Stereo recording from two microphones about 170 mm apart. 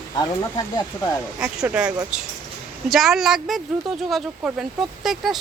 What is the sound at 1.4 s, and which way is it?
Speech, 5° right (ahead or behind).